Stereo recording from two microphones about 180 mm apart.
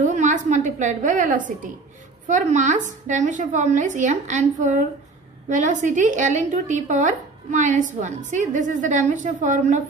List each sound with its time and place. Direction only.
0.0 s a woman's voice: 40° right (ahead or behind)